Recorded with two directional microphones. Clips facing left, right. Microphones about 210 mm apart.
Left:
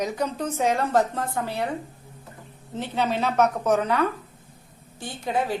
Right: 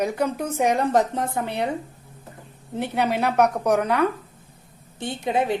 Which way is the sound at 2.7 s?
15° right (ahead or behind).